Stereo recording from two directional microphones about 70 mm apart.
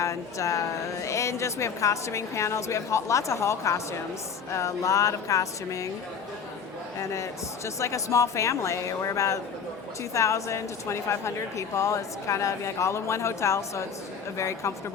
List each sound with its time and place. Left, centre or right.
0.0 s a woman's voice: left
7.1 s a woman's voice: left